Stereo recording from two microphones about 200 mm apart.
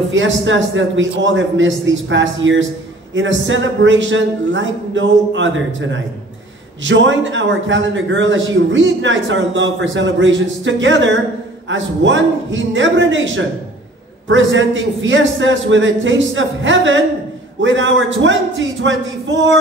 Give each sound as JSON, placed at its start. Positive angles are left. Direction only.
{"t": 0.1, "sound": "a man's voice", "side_deg": -70}